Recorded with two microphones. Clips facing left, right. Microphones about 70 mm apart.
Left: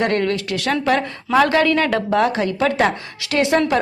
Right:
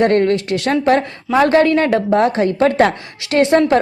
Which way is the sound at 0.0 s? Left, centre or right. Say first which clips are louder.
Right 6 dB; right.